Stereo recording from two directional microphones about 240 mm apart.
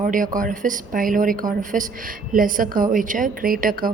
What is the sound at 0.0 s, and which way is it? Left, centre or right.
A woman's voice, right.